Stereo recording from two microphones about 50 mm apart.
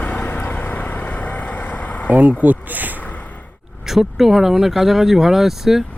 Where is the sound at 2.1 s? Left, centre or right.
Right.